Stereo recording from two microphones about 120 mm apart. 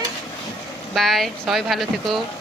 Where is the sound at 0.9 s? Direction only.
Centre (ahead or behind).